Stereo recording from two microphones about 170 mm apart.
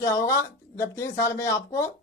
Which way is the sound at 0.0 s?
20° left (ahead or behind).